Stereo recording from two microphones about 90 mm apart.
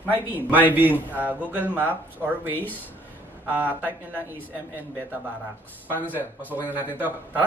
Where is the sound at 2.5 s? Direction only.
20° left (ahead or behind).